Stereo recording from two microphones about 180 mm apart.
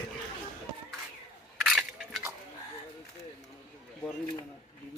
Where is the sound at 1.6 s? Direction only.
Centre (ahead or behind).